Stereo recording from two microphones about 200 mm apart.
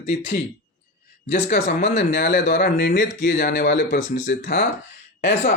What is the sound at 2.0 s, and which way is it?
Speech, 40° left (ahead or behind).